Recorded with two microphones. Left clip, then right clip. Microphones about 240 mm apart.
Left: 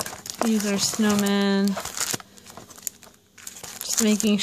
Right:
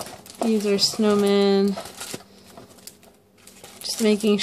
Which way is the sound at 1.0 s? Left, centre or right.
Left.